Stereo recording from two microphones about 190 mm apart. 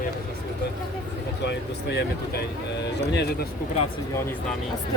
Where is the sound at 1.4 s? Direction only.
65° left (ahead or behind).